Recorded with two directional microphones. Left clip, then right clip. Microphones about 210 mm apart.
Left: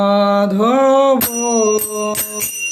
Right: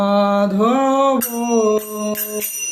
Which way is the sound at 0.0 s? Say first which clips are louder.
Left 2 dB; 30° left (ahead or behind).